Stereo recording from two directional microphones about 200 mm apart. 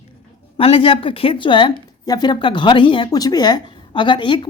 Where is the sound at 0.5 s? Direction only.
30° left (ahead or behind).